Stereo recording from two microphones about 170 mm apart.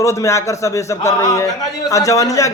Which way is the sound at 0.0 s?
15° left (ahead or behind).